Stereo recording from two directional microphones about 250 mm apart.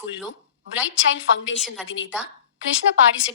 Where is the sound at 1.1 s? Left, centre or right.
Left.